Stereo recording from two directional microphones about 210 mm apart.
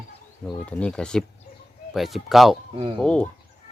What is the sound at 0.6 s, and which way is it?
Speech, 5° left (ahead or behind).